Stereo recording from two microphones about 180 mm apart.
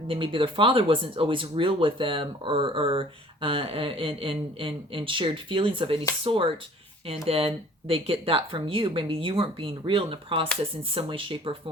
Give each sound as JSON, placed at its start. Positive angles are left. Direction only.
{"t": 0.1, "sound": "speech", "side_deg": -30}